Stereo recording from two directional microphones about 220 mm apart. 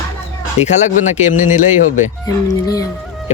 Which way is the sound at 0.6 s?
30° left (ahead or behind).